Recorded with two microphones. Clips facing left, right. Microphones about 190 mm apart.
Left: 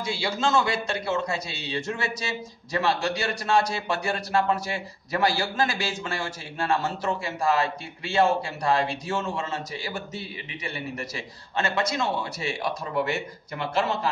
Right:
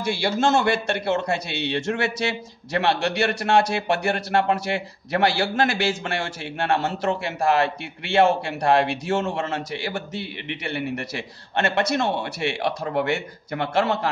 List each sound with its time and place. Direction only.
0.0 s a man's voice: 65° right (ahead or behind)